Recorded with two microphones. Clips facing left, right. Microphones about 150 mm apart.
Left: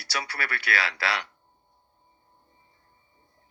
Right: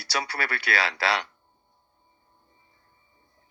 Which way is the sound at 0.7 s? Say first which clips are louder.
Right 1 dB; 25° right (ahead or behind).